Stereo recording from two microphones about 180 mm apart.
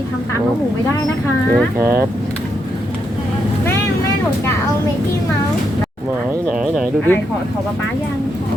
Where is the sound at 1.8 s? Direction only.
15° right (ahead or behind).